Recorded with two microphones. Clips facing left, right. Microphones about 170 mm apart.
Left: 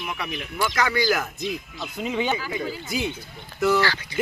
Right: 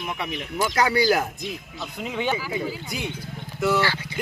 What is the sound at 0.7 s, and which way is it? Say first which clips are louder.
Speech: right 3 dB; 35° right (ahead or behind).